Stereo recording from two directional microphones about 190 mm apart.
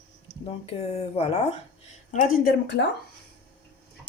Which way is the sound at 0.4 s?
30° left (ahead or behind).